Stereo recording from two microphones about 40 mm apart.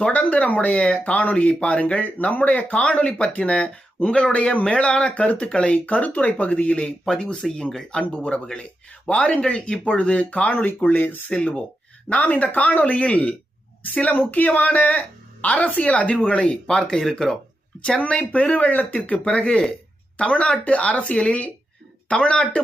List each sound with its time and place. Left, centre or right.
0.1 s speech: left
7.0 s speech: centre
8.1 s speech: left
9.5 s a man's voice: left
11.3 s speech: left
12.0 s speech: left
14.1 s a man's voice: left
17.0 s speech: centre
17.7 s speech: left
18.0 s speech: left
19.2 s speech: left